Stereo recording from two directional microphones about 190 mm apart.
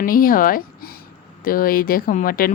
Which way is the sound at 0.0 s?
50° left (ahead or behind).